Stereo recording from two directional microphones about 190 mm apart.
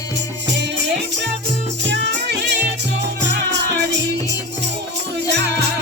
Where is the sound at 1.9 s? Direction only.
65° right (ahead or behind).